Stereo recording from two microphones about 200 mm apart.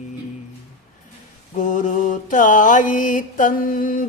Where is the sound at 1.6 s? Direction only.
40° left (ahead or behind).